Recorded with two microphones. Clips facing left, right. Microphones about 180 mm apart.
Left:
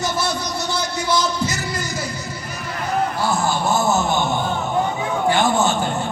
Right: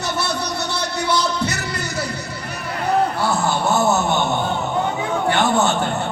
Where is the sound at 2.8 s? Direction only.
65° right (ahead or behind).